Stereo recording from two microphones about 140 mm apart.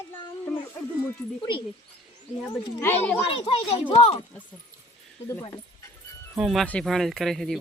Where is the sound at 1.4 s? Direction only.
35° left (ahead or behind).